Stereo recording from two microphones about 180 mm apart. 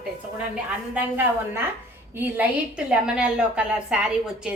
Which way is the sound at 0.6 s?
10° right (ahead or behind).